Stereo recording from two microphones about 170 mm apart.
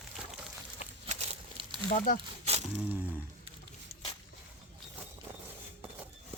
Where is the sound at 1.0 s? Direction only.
40° right (ahead or behind).